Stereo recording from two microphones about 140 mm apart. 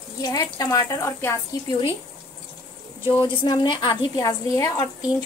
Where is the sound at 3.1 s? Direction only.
35° left (ahead or behind).